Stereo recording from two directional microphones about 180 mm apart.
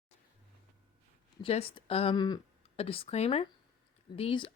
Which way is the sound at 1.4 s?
30° left (ahead or behind).